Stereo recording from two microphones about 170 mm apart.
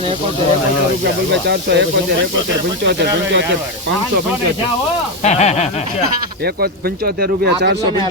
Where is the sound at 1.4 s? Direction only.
85° right.